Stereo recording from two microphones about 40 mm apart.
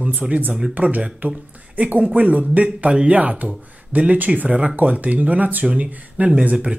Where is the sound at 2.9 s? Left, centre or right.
Right.